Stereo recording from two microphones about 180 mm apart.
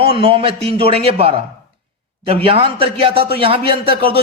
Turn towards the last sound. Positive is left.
turn(degrees=-30)  # may be behind; listen again after turning